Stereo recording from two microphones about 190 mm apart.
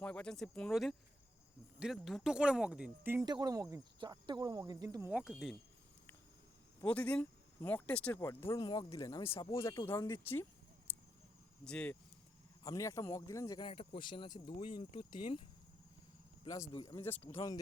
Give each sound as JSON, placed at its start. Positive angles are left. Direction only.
{"t": 0.0, "sound": "speech", "side_deg": 5}
{"t": 3.2, "sound": "cricket", "side_deg": -20}
{"t": 6.8, "sound": "speech", "side_deg": 5}
{"t": 10.9, "sound": "a sound", "side_deg": 10}
{"t": 11.6, "sound": "speech", "side_deg": 5}
{"t": 12.6, "sound": "speech", "side_deg": 15}
{"t": 16.4, "sound": "speech", "side_deg": 20}
{"t": 17.2, "sound": "speech", "side_deg": 30}